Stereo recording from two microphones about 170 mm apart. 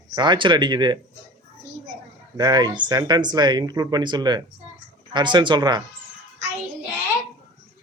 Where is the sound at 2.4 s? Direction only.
20° right (ahead or behind).